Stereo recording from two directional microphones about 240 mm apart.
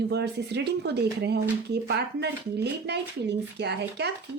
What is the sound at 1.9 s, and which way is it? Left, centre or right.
Speech, right.